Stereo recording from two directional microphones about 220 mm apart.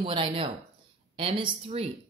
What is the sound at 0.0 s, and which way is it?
A woman's voice, 20° right (ahead or behind).